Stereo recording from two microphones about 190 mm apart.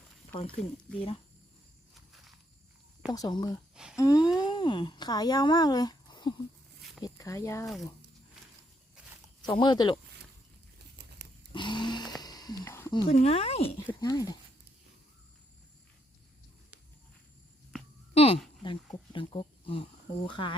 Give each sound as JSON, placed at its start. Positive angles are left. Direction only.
{"t": 0.4, "sound": "speech", "side_deg": 5}
{"t": 3.1, "sound": "speech", "side_deg": 20}
{"t": 9.5, "sound": "speech", "side_deg": 20}
{"t": 11.5, "sound": "a sound", "side_deg": 25}
{"t": 13.1, "sound": "speech", "side_deg": 35}
{"t": 13.7, "sound": "speech", "side_deg": 15}
{"t": 18.1, "sound": "a sound", "side_deg": 30}
{"t": 19.1, "sound": "speech", "side_deg": 30}